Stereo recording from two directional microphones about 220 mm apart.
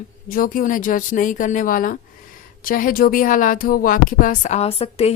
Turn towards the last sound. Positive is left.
turn(degrees=25)  # may be behind; listen again after turning